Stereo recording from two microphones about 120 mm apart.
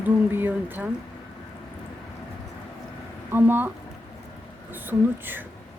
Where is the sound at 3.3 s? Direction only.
15° right (ahead or behind).